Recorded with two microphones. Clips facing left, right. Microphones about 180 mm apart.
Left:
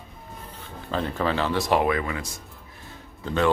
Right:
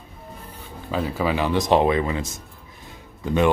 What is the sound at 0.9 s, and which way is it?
Speech, 5° right (ahead or behind).